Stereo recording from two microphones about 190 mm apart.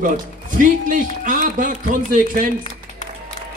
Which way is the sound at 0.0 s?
45° right (ahead or behind).